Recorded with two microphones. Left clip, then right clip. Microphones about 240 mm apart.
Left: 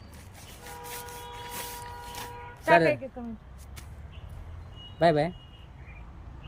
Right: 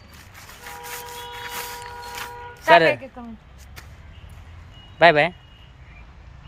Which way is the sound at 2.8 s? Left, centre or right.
Right.